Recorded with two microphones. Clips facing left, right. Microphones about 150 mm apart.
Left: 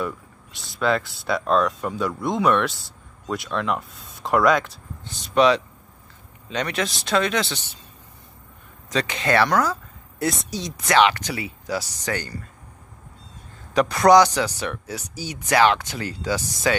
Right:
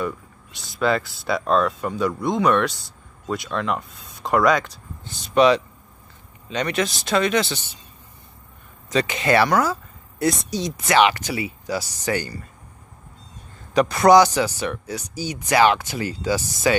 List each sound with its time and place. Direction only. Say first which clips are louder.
0.0 s speech: right 1 dB; centre (ahead or behind)
8.8 s speech: right 3 dB; 5° right (ahead or behind)
13.7 s speech: right 1 dB; centre (ahead or behind)